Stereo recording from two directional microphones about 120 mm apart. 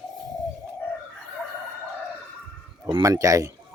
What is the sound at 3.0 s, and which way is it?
Speech, 25° right (ahead or behind).